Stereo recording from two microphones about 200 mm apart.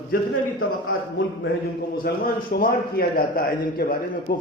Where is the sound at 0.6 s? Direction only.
90° left.